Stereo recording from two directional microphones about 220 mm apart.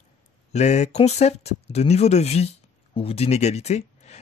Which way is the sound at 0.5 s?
30° left (ahead or behind).